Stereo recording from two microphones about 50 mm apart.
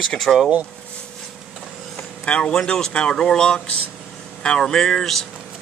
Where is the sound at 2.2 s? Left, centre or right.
Left.